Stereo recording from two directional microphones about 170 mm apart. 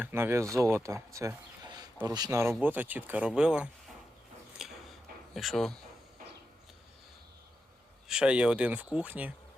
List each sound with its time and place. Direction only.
0.0 s speech: 15° right (ahead or behind)
4.6 s a sound: 5° right (ahead or behind)
5.3 s speech: centre (ahead or behind)
8.0 s speech: 5° right (ahead or behind)